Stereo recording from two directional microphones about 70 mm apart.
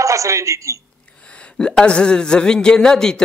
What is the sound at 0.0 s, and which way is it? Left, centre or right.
Speech, right.